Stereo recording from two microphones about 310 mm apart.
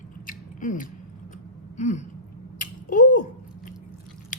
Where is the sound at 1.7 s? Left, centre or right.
Left.